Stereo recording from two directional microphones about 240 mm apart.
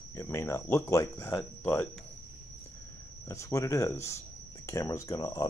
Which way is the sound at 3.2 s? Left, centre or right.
Centre.